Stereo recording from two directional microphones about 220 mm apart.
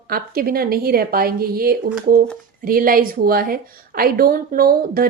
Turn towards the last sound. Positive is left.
turn(degrees=-40)  # may be behind; listen again after turning